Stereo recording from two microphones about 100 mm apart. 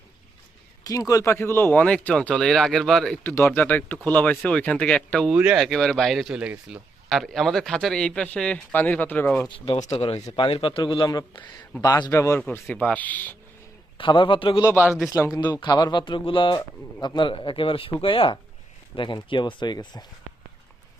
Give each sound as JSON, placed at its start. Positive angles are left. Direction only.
{"t": 0.9, "sound": "speech", "side_deg": 35}
{"t": 1.8, "sound": "a man's voice", "side_deg": 10}
{"t": 3.2, "sound": "a man's voice", "side_deg": 20}
{"t": 7.1, "sound": "a man's voice", "side_deg": 0}
{"t": 9.9, "sound": "a man's voice", "side_deg": 90}
{"t": 11.8, "sound": "a man's voice", "side_deg": 40}
{"t": 12.1, "sound": "speech", "side_deg": 30}
{"t": 12.6, "sound": "speech", "side_deg": 15}
{"t": 14.0, "sound": "a man's voice", "side_deg": 55}
{"t": 14.8, "sound": "a man's voice", "side_deg": -10}
{"t": 15.1, "sound": "a man's voice", "side_deg": 40}